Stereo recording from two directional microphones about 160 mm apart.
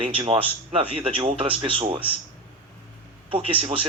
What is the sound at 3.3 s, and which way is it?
Speech, 35° right (ahead or behind).